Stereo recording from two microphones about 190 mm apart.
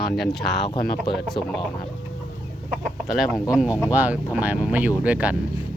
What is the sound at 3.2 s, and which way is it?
Speech, centre (ahead or behind).